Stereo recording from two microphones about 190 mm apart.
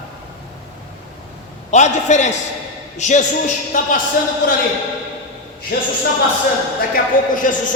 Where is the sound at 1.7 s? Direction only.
40° left (ahead or behind).